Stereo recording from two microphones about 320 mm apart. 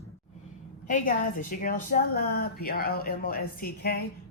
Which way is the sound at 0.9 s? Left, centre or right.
Left.